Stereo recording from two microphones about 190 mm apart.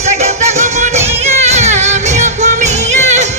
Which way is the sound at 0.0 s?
35° right (ahead or behind).